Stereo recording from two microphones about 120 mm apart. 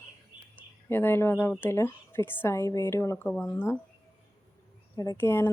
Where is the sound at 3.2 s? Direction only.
15° left (ahead or behind).